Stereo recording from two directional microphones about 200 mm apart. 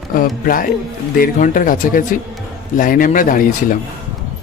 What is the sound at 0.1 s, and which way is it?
Speech, 45° left (ahead or behind).